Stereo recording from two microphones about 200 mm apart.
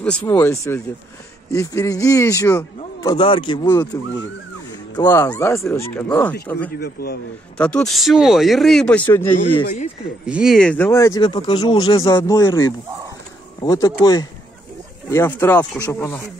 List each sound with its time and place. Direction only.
0.0 s speech: 5° left (ahead or behind); by 3.6 s 25° left (ahead or behind)
3.6 s speech: 10° left (ahead or behind)
6.7 s a man's voice: 50° left (ahead or behind)
7.5 s speech: 5° left (ahead or behind)
10.2 s speech: 5° right (ahead or behind); by 16.2 s 15° left (ahead or behind)